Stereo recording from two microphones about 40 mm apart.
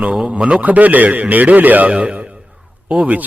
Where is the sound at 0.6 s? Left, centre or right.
Right.